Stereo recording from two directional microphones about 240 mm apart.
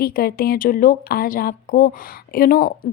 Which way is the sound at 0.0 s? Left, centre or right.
Left.